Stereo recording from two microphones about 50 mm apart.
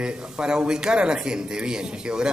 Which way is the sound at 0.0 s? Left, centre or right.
Centre.